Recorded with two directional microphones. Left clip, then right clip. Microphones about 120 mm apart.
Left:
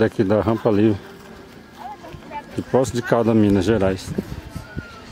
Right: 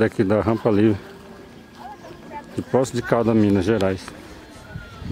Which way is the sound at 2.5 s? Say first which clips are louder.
Left 1 dB; centre (ahead or behind).